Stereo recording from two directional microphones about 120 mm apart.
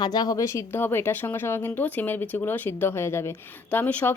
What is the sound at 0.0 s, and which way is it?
Speech, 35° left (ahead or behind).